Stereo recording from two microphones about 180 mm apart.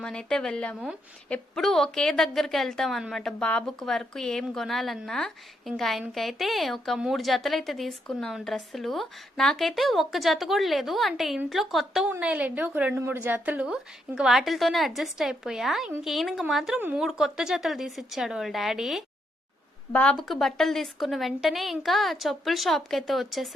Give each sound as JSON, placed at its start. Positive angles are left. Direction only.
{"t": 0.0, "sound": "a woman's voice", "side_deg": 5}